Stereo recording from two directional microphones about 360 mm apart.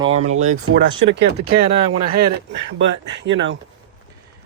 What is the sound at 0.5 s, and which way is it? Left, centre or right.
Speech, right.